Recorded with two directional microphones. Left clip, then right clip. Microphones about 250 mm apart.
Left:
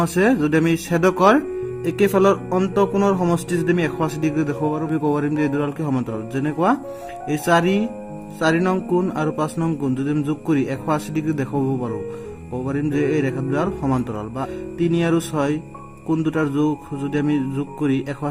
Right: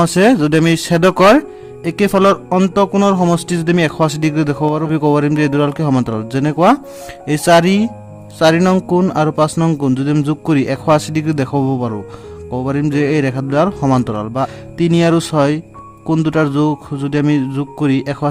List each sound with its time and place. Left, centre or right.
0.0 s speech: right